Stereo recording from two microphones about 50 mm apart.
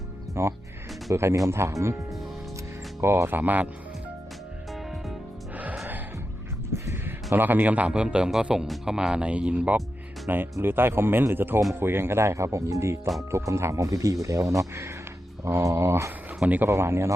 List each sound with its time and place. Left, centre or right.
0.4 s speech: right
3.0 s speech: right
4.7 s music: centre
6.7 s a sound: right
7.3 s speech: right
7.9 s a man's voice: centre
8.6 s speech: centre
8.9 s speech: centre
10.2 s speech: right
16.4 s speech: right
16.6 s speech: right